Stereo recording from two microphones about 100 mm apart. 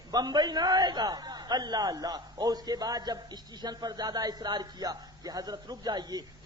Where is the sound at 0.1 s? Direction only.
45° right (ahead or behind).